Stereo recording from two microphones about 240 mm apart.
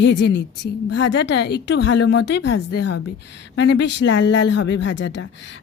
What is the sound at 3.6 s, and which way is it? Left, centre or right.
Speech, left.